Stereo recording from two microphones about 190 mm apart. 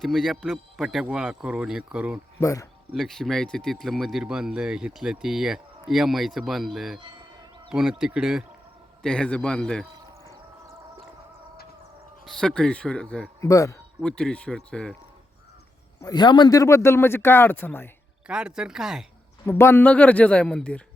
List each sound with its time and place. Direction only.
0.0 s speech: centre (ahead or behind)
2.4 s speech: 15° left (ahead or behind)
2.9 s speech: centre (ahead or behind)
12.2 s speech: centre (ahead or behind)
13.5 s speech: 15° left (ahead or behind)
14.0 s speech: 5° left (ahead or behind)
16.0 s speech: 20° left (ahead or behind)
18.3 s speech: 5° right (ahead or behind)
19.5 s speech: 15° left (ahead or behind)